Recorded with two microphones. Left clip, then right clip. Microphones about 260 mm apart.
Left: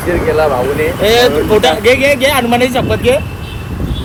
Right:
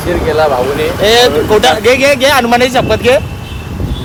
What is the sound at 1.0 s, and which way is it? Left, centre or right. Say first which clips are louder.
Speech: right 2 dB; right.